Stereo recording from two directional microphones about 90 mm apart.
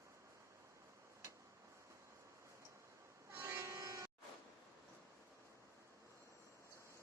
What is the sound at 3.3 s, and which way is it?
Vehicle horn, 30° right (ahead or behind).